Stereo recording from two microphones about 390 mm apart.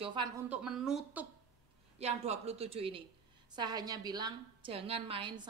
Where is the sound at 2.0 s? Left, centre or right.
Centre.